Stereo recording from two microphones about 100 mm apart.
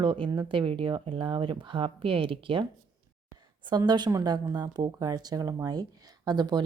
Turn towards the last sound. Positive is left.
turn(degrees=-45)  # may be behind; listen again after turning